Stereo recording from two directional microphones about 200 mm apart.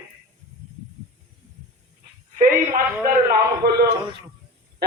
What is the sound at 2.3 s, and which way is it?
A man's voice, 45° right (ahead or behind).